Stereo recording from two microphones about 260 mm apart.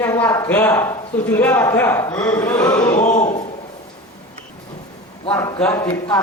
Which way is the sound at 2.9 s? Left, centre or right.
Left.